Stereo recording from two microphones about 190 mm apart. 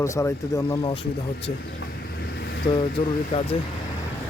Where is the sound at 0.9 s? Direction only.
30° left (ahead or behind).